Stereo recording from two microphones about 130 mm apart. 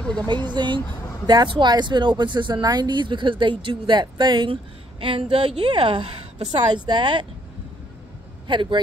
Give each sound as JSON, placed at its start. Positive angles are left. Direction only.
{"t": 0.0, "sound": "a sound", "side_deg": 5}
{"t": 0.6, "sound": "speech", "side_deg": -35}
{"t": 5.0, "sound": "speech", "side_deg": -45}
{"t": 8.5, "sound": "speech", "side_deg": -35}